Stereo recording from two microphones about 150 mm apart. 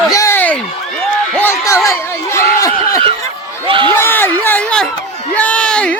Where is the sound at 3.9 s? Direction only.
15° left (ahead or behind).